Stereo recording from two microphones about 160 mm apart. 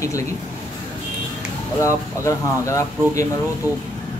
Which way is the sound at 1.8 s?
20° left (ahead or behind).